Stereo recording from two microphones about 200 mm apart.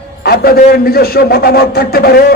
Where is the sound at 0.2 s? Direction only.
50° left (ahead or behind).